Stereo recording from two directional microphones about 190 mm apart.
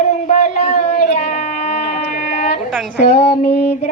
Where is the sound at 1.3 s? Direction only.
35° left (ahead or behind).